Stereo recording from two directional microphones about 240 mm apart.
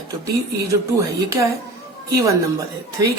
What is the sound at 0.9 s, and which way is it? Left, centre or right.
Speech, centre.